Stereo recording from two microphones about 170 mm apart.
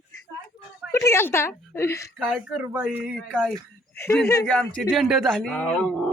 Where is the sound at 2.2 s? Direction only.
5° right (ahead or behind).